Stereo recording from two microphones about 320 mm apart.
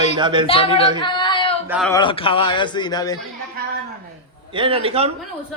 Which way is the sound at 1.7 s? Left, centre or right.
Centre.